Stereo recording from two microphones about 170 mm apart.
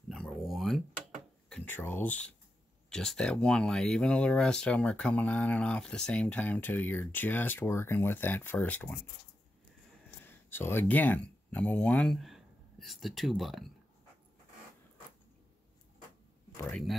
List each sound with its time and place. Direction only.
0.1 s a sound: centre (ahead or behind)
1.5 s speech: 10° left (ahead or behind)
10.2 s speech: 15° left (ahead or behind)
16.5 s speech: 10° left (ahead or behind)